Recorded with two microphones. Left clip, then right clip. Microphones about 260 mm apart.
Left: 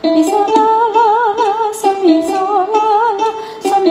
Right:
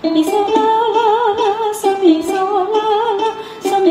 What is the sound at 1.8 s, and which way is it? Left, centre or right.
Music, left.